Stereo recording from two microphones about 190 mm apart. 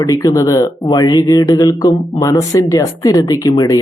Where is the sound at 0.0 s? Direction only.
20° left (ahead or behind).